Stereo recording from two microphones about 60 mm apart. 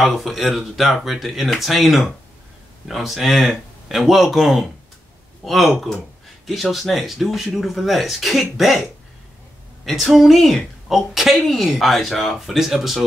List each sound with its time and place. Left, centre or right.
0.0 s speech: centre
9.8 s speech: centre